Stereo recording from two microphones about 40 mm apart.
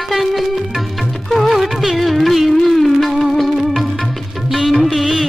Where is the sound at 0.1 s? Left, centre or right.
Centre.